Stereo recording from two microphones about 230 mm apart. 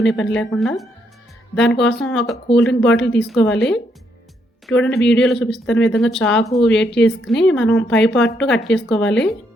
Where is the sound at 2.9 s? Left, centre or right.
Left.